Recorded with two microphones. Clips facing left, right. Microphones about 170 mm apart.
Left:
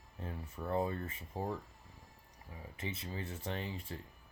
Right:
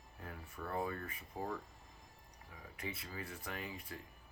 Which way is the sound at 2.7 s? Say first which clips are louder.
Left 3 dB; 25° left (ahead or behind).